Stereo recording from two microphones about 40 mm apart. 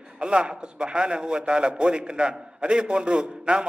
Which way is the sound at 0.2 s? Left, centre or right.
Right.